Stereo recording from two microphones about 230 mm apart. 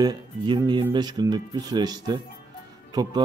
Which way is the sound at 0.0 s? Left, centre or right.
Centre.